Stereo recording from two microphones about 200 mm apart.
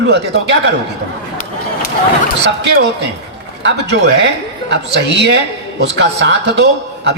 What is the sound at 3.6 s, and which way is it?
A man's voice, 60° right (ahead or behind).